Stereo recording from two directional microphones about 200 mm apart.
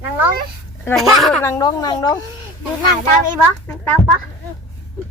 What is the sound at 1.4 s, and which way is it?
Speech, 15° left (ahead or behind).